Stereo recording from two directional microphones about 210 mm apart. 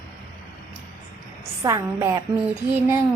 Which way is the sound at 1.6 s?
15° right (ahead or behind).